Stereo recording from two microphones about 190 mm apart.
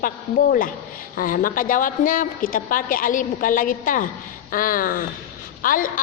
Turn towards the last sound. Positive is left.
turn(degrees=45)  # may be behind; listen again after turning